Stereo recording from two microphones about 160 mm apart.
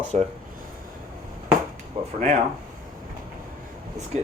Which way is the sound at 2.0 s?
40° right (ahead or behind).